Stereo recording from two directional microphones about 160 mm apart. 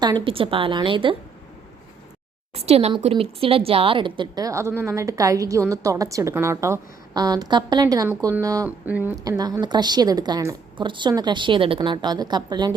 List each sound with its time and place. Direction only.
0.0 s a woman's voice: 30° right (ahead or behind)
2.6 s a woman's voice: 40° right (ahead or behind); by 8.7 s 20° right (ahead or behind)
8.8 s speech: 10° right (ahead or behind)
9.4 s a woman's voice: 25° right (ahead or behind)